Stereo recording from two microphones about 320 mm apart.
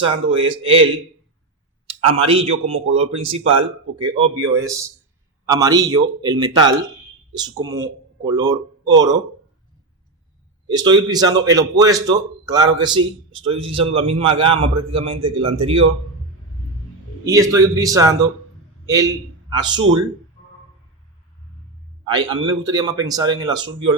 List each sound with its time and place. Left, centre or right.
0.0 s speech: centre
2.1 s speech: centre
10.7 s speech: centre
17.2 s a man's voice: centre
22.0 s a man's voice: centre